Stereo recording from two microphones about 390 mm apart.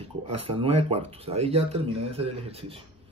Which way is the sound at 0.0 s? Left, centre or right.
Centre.